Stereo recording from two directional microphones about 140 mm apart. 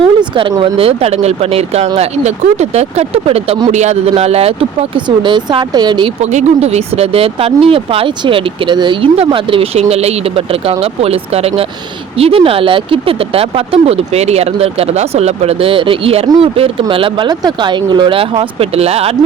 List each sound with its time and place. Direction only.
0.0 s speech: 35° right (ahead or behind)
5.0 s speech: 35° right (ahead or behind)
6.2 s speech: 50° right (ahead or behind)